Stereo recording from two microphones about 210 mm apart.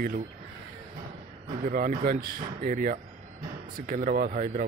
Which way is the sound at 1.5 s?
40° right (ahead or behind).